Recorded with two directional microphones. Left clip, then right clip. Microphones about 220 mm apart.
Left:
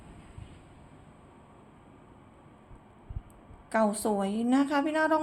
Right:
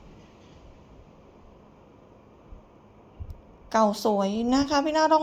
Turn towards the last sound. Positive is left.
turn(degrees=-10)  # may be behind; listen again after turning